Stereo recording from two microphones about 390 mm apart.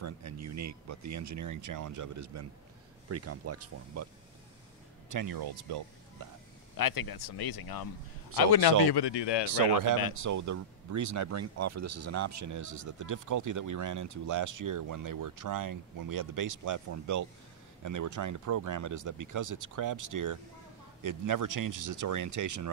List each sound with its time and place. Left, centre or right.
0.0 s speech: right
5.1 s speech: right
6.8 s speech: left
10.1 s speech: right